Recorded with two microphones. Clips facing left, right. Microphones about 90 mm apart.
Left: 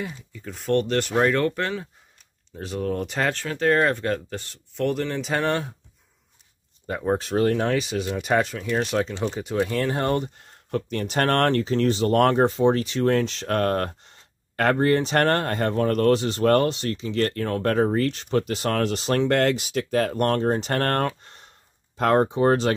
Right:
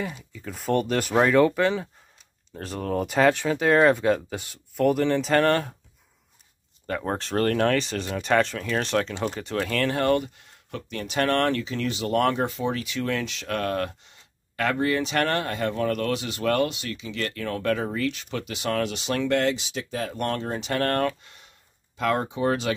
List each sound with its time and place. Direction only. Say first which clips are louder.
0.3 s speech: left 2 dB; centre (ahead or behind)
7.1 s speech: left 4 dB; 5° left (ahead or behind); by 10.3 s 30° left (ahead or behind)
10.3 s speech: left 9 dB; 45° left (ahead or behind)